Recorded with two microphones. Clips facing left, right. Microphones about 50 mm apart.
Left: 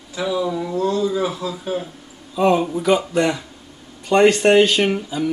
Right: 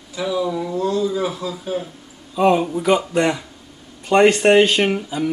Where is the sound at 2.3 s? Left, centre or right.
Centre.